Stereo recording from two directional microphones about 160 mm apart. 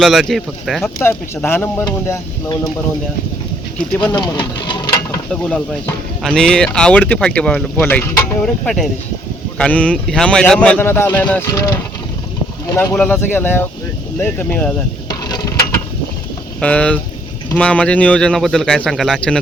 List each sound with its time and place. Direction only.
0.0 s speech: centre (ahead or behind)
1.0 s speech: 15° left (ahead or behind)
1.8 s speech: 25° left (ahead or behind)
4.1 s speech: 30° left (ahead or behind)
5.3 s speech: 5° left (ahead or behind)
16.6 s speech: 10° left (ahead or behind)